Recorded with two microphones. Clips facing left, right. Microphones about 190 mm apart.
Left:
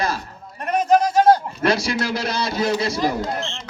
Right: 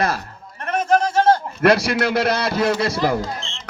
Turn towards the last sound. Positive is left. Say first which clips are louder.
# left 4 dB
turn(degrees=60)  # may be behind; listen again after turning